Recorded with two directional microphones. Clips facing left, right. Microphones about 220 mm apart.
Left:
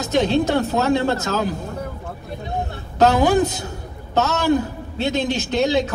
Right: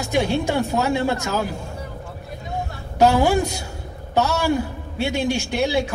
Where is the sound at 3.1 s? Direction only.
20° left (ahead or behind).